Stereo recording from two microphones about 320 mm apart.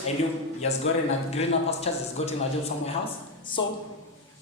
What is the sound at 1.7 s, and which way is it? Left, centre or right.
A man's voice, centre.